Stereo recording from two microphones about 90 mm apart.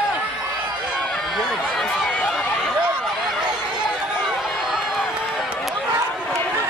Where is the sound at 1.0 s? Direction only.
Centre (ahead or behind).